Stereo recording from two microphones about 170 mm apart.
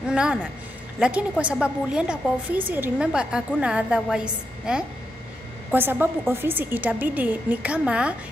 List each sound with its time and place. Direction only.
0.1 s a woman's voice: 5° right (ahead or behind)